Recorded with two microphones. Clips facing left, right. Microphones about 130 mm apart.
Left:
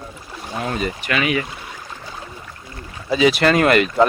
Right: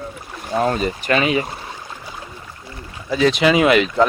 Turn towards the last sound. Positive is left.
turn(degrees=0)  # may be behind; listen again after turning